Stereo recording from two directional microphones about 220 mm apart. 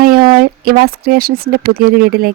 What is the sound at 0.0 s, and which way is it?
Speech, 40° right (ahead or behind).